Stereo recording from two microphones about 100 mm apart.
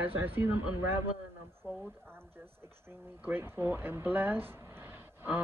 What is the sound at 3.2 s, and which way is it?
Speech, 20° right (ahead or behind).